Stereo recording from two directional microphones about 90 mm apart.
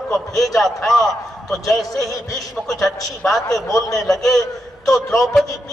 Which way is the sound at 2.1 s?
40° left (ahead or behind).